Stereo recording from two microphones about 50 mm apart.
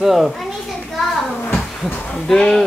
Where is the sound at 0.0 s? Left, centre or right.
Centre.